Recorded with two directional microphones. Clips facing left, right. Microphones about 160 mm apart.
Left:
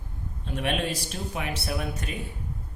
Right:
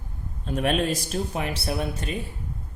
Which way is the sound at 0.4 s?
40° right (ahead or behind).